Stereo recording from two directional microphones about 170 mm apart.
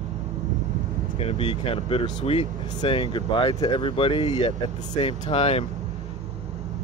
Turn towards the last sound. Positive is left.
turn(degrees=35)  # may be behind; listen again after turning